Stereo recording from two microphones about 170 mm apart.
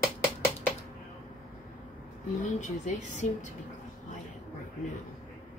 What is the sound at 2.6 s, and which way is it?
Speech, 45° left (ahead or behind).